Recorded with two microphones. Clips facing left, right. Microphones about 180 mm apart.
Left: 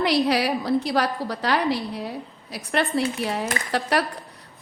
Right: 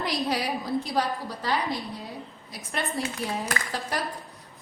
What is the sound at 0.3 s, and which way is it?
A woman's voice, 75° left (ahead or behind).